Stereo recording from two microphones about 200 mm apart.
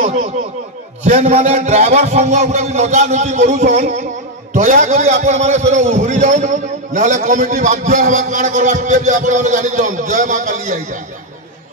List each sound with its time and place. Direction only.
0.0 s a man's voice: 35° right (ahead or behind)